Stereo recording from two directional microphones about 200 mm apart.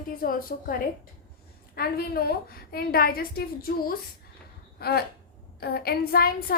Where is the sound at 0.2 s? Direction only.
45° left (ahead or behind).